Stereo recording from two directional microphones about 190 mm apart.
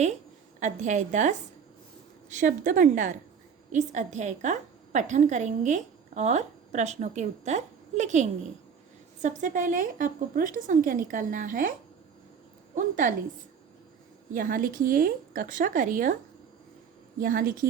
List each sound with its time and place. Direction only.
0.6 s a woman's voice: 40° right (ahead or behind)
12.7 s a woman's voice: 45° right (ahead or behind)
14.3 s a woman's voice: 45° right (ahead or behind)
17.2 s a woman's voice: 45° right (ahead or behind)